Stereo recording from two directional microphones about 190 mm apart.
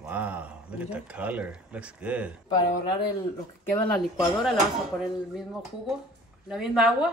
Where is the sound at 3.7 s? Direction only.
Centre (ahead or behind).